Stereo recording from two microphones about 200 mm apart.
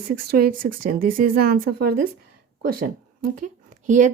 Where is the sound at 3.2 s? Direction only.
40° right (ahead or behind).